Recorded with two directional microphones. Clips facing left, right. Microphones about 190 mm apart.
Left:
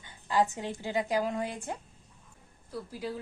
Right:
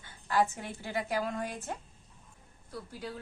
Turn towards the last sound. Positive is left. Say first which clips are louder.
# left 4 dB
turn(degrees=0)  # may be behind; listen again after turning